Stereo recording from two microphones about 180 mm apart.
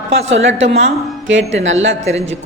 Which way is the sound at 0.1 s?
90° right.